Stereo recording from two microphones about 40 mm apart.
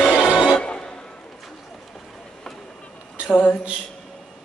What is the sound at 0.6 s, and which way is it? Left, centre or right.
Music, left.